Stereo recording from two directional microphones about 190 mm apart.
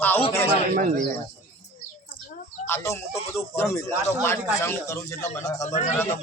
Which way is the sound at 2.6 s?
15° left (ahead or behind).